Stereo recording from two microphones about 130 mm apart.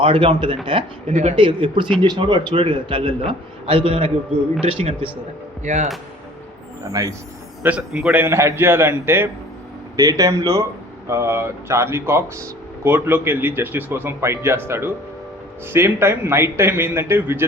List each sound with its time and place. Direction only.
0.0 s speech: 45° right (ahead or behind)
1.0 s speech: 60° right (ahead or behind)
1.4 s a man's voice: 40° right (ahead or behind)
5.6 s speech: 65° right (ahead or behind)
6.9 s a man's voice: 25° right (ahead or behind)
7.6 s speech: 10° right (ahead or behind)
8.2 s speech: 20° right (ahead or behind)
10.0 s a man's voice: 30° right (ahead or behind)